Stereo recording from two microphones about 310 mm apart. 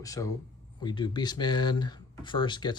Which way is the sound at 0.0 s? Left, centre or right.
Centre.